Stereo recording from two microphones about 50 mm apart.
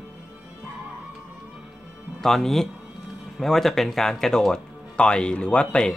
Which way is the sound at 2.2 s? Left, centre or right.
Centre.